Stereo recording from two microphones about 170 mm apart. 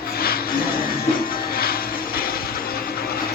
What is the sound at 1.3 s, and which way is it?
Music, 60° left (ahead or behind).